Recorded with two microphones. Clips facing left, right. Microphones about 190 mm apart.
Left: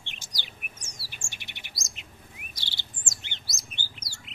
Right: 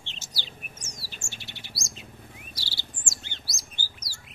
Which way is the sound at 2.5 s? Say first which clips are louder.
Right 3 dB; 20° left (ahead or behind).